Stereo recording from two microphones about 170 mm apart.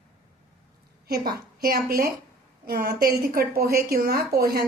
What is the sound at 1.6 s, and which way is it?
A woman's voice, 60° right (ahead or behind).